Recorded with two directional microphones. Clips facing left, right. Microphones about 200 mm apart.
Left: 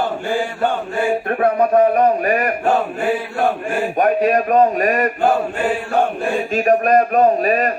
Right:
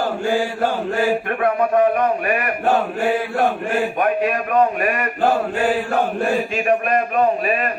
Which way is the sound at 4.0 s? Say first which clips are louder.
Left 4 dB; 40° left (ahead or behind).